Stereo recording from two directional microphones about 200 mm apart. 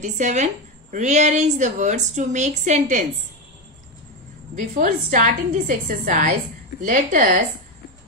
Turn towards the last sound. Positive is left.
turn(degrees=-40)  # may be behind; listen again after turning